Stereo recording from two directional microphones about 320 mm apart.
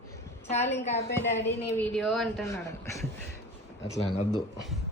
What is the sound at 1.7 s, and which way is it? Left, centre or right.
Speech, centre.